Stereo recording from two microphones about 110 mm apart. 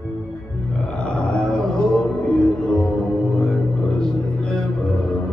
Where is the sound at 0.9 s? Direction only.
10° left (ahead or behind).